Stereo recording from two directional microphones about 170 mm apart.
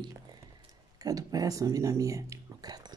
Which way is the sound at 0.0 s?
25° right (ahead or behind).